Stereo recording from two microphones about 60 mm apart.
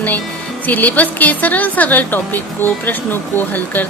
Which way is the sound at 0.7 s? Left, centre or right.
Left.